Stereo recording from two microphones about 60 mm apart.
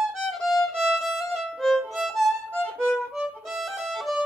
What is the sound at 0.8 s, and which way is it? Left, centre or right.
Violin, centre.